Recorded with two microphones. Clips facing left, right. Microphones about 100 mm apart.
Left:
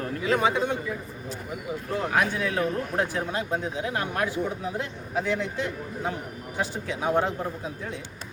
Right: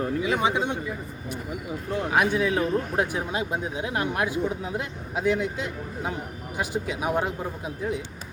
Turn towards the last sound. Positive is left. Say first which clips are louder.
# left 1 dB
turn(degrees=-15)  # may be behind; listen again after turning